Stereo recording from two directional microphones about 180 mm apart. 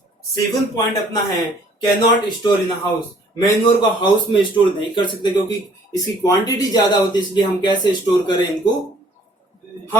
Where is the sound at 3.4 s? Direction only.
25° left (ahead or behind).